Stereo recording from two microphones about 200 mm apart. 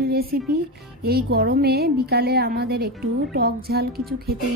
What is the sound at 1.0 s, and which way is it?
A woman's voice, 50° right (ahead or behind).